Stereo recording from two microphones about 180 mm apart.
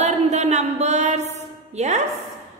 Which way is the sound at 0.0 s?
40° right (ahead or behind).